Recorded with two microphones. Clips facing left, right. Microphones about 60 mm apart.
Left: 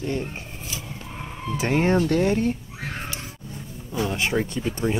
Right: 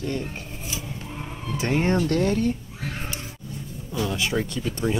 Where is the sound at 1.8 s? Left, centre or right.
Centre.